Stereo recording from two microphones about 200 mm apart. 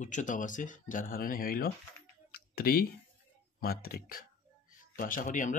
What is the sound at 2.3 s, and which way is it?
Typing, 50° left (ahead or behind).